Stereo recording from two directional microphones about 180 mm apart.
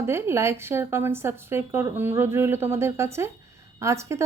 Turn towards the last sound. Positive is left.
turn(degrees=-15)  # may be behind; listen again after turning